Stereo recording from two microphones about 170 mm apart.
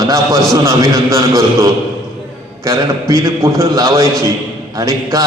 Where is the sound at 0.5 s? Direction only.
15° right (ahead or behind).